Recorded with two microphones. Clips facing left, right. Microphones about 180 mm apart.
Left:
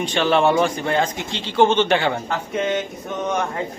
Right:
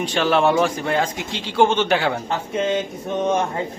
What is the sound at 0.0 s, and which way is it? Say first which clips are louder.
A man's voice: even; 5° right (ahead or behind).